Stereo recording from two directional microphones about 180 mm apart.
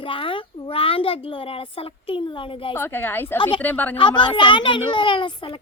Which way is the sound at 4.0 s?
25° left (ahead or behind).